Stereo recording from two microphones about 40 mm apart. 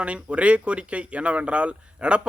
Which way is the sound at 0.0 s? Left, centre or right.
Right.